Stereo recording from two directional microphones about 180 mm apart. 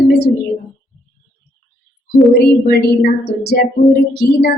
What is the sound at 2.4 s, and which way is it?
Speech, 60° left (ahead or behind).